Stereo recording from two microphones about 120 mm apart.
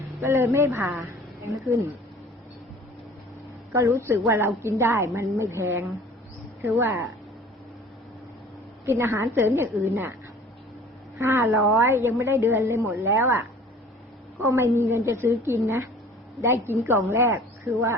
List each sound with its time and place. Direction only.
0.2 s a woman's voice: 25° right (ahead or behind)
3.7 s a woman's voice: 25° right (ahead or behind)
8.9 s a woman's voice: 20° right (ahead or behind)
11.2 s a woman's voice: 25° right (ahead or behind)
14.4 s a woman's voice: 20° right (ahead or behind)